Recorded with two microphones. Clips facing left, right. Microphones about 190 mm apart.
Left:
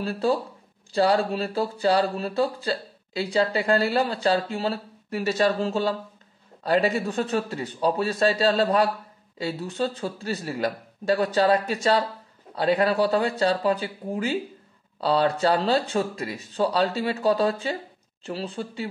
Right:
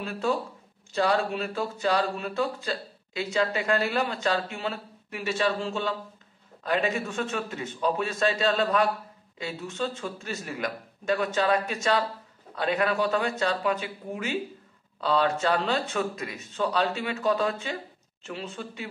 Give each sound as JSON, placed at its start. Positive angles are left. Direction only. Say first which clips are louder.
{"t": 0.0, "sound": "speech", "louder": "left 4 dB", "side_deg": 35}